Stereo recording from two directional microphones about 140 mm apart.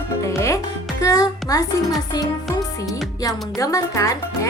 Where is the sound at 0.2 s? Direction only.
20° left (ahead or behind).